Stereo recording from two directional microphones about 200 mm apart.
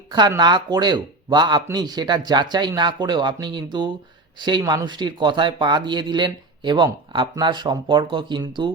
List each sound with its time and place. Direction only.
0.1 s speech: 20° right (ahead or behind)